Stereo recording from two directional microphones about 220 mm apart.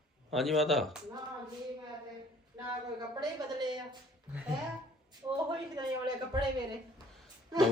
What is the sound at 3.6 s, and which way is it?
Speech, 20° right (ahead or behind).